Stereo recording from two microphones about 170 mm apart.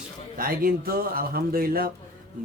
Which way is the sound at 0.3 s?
60° right (ahead or behind).